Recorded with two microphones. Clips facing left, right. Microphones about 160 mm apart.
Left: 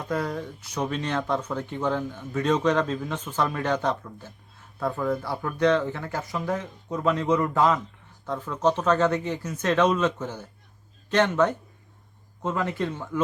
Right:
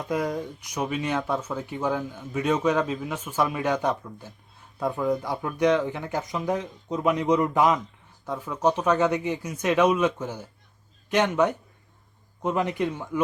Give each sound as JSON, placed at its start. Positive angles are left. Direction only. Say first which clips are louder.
{"t": 0.1, "sound": "speech", "louder": "right 1 dB", "side_deg": -15}